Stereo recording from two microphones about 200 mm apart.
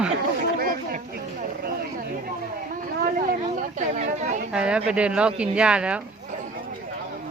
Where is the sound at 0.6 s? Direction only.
45° right (ahead or behind).